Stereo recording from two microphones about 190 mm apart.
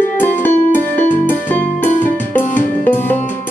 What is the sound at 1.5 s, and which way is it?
Music, 10° left (ahead or behind).